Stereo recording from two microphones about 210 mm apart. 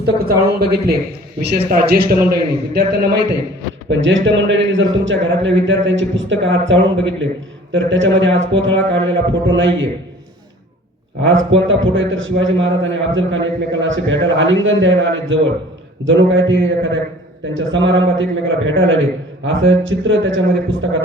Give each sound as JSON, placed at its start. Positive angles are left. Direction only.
{"t": 0.0, "sound": "a man's voice", "side_deg": -50}
{"t": 3.8, "sound": "a man's voice", "side_deg": -60}
{"t": 11.2, "sound": "a man's voice", "side_deg": -65}